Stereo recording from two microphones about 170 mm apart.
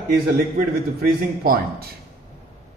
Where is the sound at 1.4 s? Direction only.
60° right (ahead or behind).